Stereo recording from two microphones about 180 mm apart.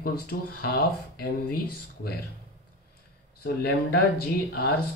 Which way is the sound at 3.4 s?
60° left (ahead or behind).